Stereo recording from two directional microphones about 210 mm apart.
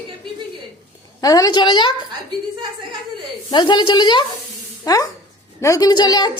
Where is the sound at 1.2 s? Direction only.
15° left (ahead or behind).